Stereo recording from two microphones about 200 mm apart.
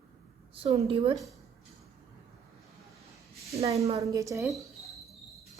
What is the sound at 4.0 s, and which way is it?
Speech, 15° right (ahead or behind).